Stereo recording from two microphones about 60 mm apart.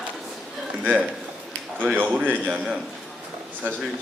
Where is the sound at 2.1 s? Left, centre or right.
Right.